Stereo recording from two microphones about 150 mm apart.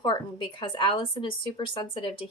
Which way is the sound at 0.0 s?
30° left (ahead or behind).